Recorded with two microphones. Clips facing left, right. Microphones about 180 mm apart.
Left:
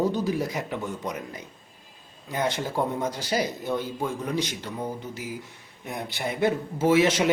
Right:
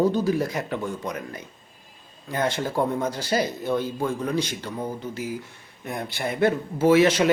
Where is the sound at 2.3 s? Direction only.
15° left (ahead or behind).